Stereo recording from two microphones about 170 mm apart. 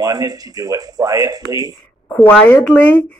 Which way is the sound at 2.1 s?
10° left (ahead or behind).